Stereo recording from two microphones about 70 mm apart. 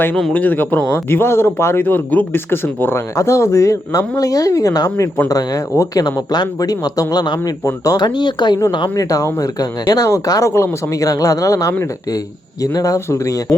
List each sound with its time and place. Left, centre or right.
0.3 s a man's voice: left
3.2 s a man's voice: left
5.7 s a man's voice: left
6.1 s speech: left
7.9 s speech: left
8.7 s speech: left
10.5 s speech: left
11.1 s speech: left
12.7 s a man's voice: left